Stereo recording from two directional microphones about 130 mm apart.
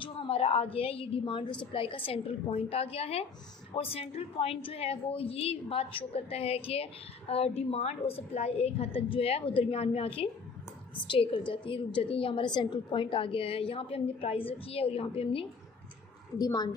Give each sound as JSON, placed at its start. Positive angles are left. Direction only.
{"t": 0.0, "sound": "a woman's voice", "side_deg": 45}
{"t": 16.3, "sound": "a woman's voice", "side_deg": 30}